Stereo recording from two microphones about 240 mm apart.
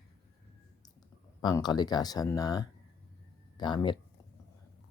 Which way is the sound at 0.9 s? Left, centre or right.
Centre.